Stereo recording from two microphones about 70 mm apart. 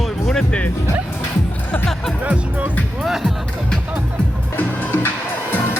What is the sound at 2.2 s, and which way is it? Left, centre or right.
Speech, right.